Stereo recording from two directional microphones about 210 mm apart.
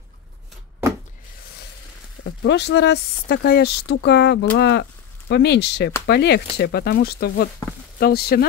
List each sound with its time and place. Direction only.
2.2 s speech: 55° left (ahead or behind)